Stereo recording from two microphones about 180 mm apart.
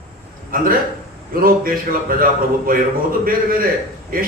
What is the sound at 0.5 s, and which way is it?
A man's voice, 50° right (ahead or behind).